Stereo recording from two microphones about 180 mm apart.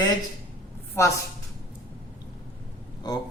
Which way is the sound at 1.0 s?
15° left (ahead or behind).